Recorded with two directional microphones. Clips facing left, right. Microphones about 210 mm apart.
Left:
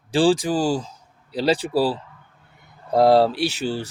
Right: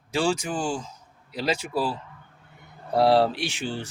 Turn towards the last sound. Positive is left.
turn(degrees=40)  # may be behind; listen again after turning